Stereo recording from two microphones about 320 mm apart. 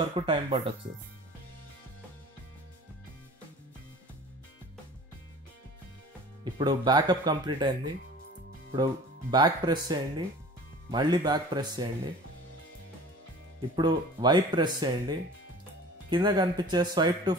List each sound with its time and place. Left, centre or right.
0.1 s speech: centre
6.4 s speech: centre
8.7 s speech: centre
13.7 s speech: centre